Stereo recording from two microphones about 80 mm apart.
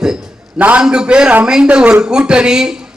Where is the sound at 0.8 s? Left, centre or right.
Centre.